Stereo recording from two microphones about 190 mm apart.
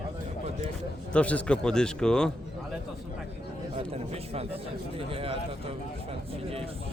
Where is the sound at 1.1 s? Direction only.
5° left (ahead or behind).